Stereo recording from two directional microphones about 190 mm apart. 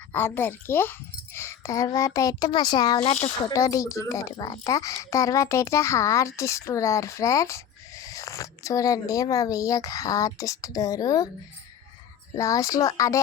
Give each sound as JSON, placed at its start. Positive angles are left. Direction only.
{"t": 0.1, "sound": "speech", "side_deg": 10}
{"t": 12.4, "sound": "speech", "side_deg": 15}